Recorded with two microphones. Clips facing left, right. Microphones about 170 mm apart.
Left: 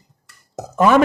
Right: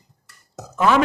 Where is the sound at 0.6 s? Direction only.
50° left (ahead or behind).